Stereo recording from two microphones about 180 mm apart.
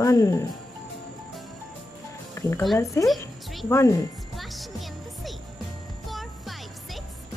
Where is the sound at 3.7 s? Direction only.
15° left (ahead or behind).